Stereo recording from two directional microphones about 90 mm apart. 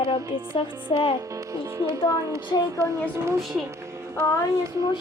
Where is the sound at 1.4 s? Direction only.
35° right (ahead or behind).